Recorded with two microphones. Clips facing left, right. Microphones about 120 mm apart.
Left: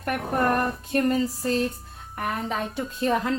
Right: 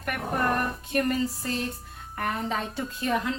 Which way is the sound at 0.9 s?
30° left (ahead or behind).